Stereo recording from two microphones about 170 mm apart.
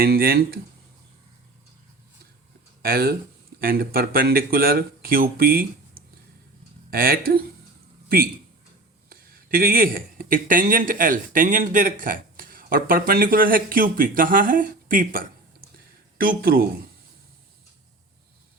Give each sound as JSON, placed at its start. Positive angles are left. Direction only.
{"t": 0.0, "sound": "speech", "side_deg": -60}
{"t": 2.8, "sound": "speech", "side_deg": -60}
{"t": 9.0, "sound": "speech", "side_deg": -60}
{"t": 16.2, "sound": "speech", "side_deg": -60}